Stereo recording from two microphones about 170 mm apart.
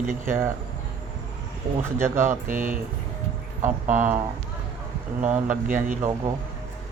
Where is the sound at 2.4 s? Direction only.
50° right (ahead or behind).